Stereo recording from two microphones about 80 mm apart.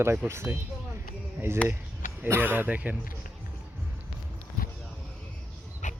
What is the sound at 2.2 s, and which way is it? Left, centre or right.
Speech, right.